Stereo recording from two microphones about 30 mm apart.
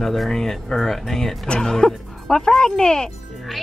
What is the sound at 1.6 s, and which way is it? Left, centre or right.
Speech, centre.